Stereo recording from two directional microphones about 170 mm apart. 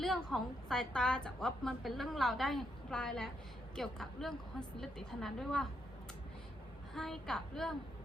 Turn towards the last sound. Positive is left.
turn(degrees=5)  # may be behind; listen again after turning